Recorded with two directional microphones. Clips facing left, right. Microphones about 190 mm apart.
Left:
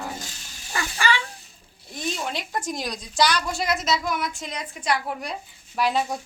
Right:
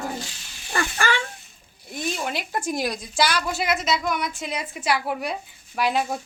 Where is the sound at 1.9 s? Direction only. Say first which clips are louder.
Right 1 dB; 5° right (ahead or behind).